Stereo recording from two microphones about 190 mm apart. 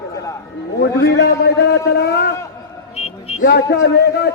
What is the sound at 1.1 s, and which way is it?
A man's voice, 60° left (ahead or behind).